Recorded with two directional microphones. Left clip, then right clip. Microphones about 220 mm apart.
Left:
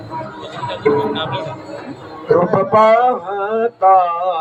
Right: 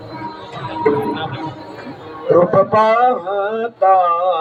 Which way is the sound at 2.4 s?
25° right (ahead or behind).